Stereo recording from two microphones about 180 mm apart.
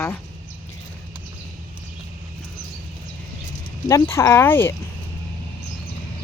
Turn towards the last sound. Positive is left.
turn(degrees=10)  # may be behind; listen again after turning